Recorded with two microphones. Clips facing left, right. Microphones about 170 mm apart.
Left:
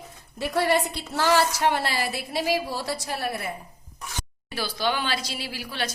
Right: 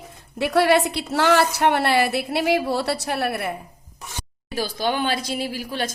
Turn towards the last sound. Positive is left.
turn(degrees=-45)  # may be behind; listen again after turning